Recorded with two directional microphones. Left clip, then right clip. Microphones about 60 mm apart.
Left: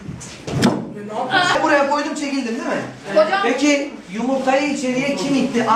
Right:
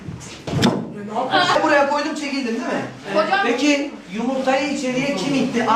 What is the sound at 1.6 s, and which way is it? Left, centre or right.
Speech, centre.